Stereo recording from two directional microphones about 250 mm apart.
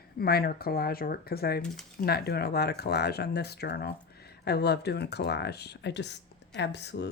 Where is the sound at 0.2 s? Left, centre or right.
Left.